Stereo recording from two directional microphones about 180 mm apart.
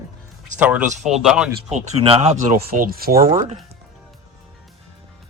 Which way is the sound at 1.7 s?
35° right (ahead or behind).